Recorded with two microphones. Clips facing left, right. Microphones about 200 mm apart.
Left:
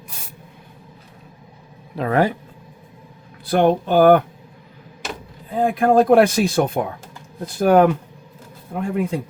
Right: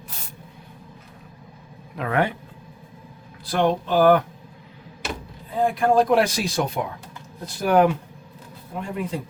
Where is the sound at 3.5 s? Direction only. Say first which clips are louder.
Left 5 dB; 55° left (ahead or behind).